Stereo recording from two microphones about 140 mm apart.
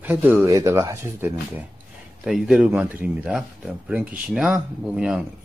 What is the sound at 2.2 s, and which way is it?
Speech, 5° right (ahead or behind).